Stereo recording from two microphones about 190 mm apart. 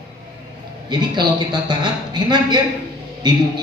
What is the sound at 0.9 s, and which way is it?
A man's voice, 25° right (ahead or behind).